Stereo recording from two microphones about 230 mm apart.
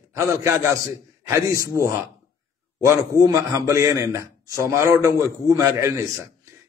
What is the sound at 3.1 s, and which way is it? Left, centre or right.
A man's voice, centre.